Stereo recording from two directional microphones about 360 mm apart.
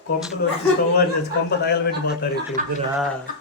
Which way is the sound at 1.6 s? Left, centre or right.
Left.